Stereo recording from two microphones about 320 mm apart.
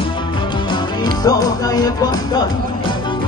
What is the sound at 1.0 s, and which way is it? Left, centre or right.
Music, centre.